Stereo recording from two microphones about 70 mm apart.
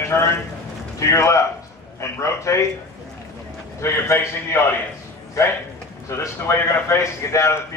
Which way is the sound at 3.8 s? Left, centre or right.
Left.